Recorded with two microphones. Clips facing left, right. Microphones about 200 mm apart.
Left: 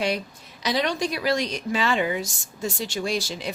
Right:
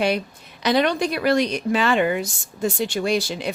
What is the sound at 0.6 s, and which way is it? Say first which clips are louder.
Speech: right 5 dB; 60° right (ahead or behind).